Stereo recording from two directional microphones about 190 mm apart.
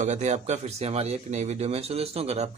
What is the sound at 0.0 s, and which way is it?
Speech, 40° right (ahead or behind).